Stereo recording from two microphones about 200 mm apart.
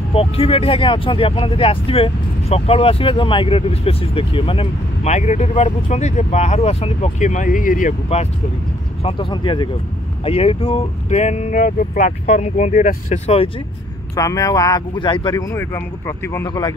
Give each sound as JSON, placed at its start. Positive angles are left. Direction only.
{"t": 0.1, "sound": "speech", "side_deg": 30}
{"t": 9.0, "sound": "speech", "side_deg": 25}
{"t": 14.1, "sound": "speech", "side_deg": 15}